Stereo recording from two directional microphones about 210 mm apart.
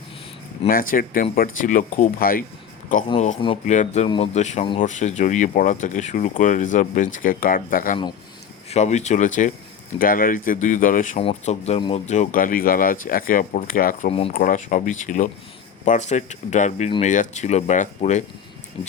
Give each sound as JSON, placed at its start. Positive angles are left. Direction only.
{"t": 0.7, "sound": "speech", "side_deg": 40}
{"t": 3.1, "sound": "speech", "side_deg": 30}
{"t": 14.1, "sound": "speech", "side_deg": 25}
{"t": 14.3, "sound": "speech", "side_deg": 40}